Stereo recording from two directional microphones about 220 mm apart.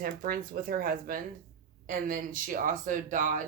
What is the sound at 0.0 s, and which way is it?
Speech, 40° right (ahead or behind).